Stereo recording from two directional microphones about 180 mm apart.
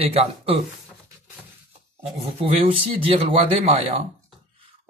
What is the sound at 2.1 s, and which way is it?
Speech, 30° right (ahead or behind).